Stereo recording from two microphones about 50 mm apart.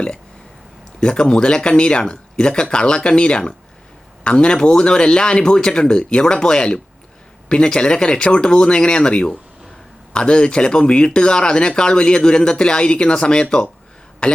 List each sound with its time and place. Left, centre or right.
0.9 s a man's voice: centre